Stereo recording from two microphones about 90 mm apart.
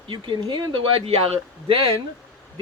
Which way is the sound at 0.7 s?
80° right.